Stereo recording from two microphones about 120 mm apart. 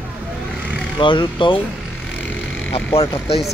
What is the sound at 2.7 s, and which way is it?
Speech, 55° left (ahead or behind).